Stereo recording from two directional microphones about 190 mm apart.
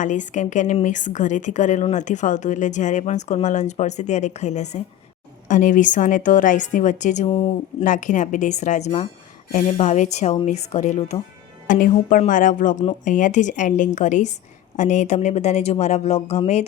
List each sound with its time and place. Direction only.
0.0 s a woman's voice: 40° left (ahead or behind)